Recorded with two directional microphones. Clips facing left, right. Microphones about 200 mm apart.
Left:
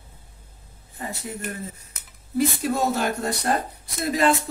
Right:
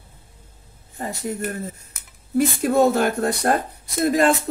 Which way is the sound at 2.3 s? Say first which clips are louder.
Right 5 dB; 50° right (ahead or behind).